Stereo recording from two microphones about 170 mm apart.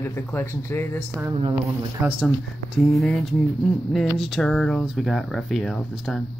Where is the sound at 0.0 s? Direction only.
15° left (ahead or behind).